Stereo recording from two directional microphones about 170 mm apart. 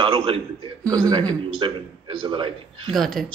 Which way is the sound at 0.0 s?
30° right (ahead or behind).